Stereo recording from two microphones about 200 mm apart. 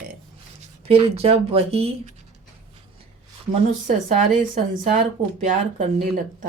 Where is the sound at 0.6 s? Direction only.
30° right (ahead or behind).